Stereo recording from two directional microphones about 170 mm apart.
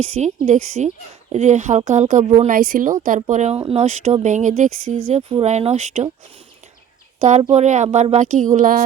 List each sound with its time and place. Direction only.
0.2 s speech: 45° right (ahead or behind)
7.2 s speech: 40° right (ahead or behind)